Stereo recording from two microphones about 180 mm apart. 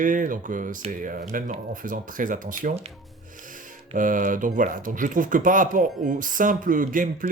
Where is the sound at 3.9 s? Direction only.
50° right (ahead or behind).